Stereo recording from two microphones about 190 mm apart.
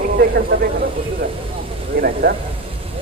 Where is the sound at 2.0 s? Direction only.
55° right (ahead or behind).